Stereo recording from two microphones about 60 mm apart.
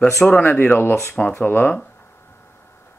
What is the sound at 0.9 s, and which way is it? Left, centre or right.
Speech, left.